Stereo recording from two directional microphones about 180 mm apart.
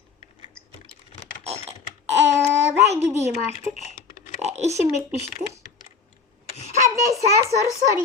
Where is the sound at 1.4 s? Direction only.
35° right (ahead or behind).